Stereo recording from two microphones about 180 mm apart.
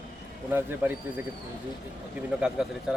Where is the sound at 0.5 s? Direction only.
10° right (ahead or behind).